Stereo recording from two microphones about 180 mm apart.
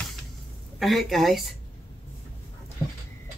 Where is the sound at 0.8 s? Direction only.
Centre (ahead or behind).